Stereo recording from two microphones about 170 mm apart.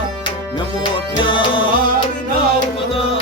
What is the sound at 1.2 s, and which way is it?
Music, 30° left (ahead or behind).